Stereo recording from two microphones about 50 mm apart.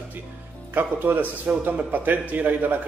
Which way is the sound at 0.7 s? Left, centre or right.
Right.